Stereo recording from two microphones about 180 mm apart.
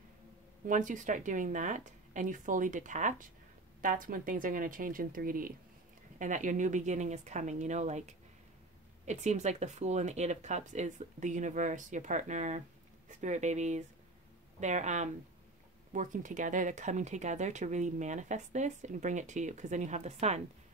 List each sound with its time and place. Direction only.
0.7 s speech: 45° right (ahead or behind)
9.0 s speech: 40° right (ahead or behind)